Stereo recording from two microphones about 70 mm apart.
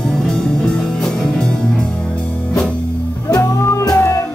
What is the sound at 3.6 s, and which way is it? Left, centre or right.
Music, left.